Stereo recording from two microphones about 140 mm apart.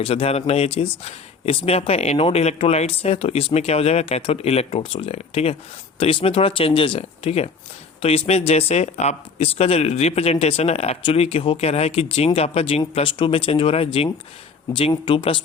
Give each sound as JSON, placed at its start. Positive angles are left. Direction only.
{"t": 0.0, "sound": "speech", "side_deg": 45}